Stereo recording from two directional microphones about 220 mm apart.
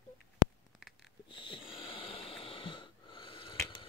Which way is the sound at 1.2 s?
20° left (ahead or behind).